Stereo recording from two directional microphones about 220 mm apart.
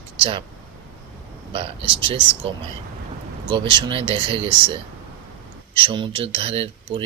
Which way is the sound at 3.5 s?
20° right (ahead or behind).